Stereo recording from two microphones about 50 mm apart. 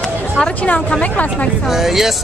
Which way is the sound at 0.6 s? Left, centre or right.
Left.